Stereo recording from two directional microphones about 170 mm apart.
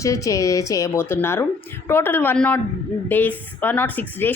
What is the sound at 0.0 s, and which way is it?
A woman's voice, 20° left (ahead or behind).